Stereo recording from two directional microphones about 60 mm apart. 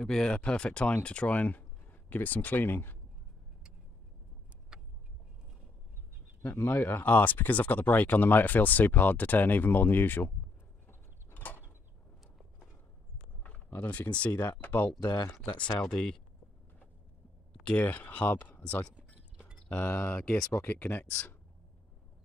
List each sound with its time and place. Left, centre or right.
0.0 s speech: centre; by 3.0 s left
6.5 s speech: left
10.9 s a sound: left
13.7 s speech: left
15.8 s speech: centre
17.6 s speech: left
19.3 s a sound: centre
19.7 s speech: left
20.2 s speech: centre
20.5 s speech: left